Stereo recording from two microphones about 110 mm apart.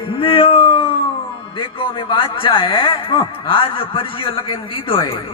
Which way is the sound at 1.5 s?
50° left (ahead or behind).